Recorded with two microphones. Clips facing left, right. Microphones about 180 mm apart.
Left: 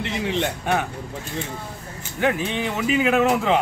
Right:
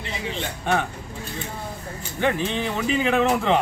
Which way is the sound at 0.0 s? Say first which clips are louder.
Left 6 dB; 70° left (ahead or behind).